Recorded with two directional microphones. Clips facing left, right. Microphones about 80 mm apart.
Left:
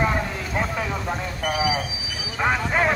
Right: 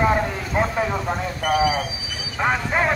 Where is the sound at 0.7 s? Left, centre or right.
Centre.